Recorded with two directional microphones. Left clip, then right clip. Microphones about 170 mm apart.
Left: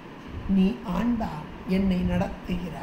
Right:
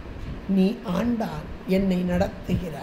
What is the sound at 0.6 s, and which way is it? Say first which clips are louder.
A woman's voice: right 3 dB; 60° right (ahead or behind).